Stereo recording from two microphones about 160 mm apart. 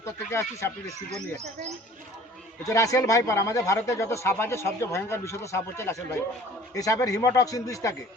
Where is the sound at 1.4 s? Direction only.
45° right (ahead or behind).